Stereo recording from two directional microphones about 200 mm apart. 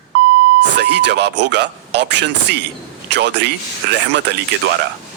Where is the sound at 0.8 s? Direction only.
60° right (ahead or behind).